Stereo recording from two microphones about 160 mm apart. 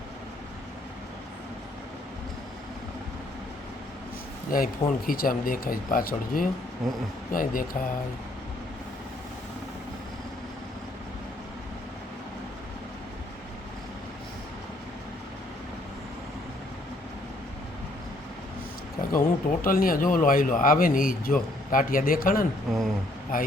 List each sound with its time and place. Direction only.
4.5 s speech: 65° left (ahead or behind)
6.8 s speech: centre (ahead or behind)
7.3 s speech: 60° left (ahead or behind)
19.1 s speech: 60° left (ahead or behind)
22.7 s speech: centre (ahead or behind)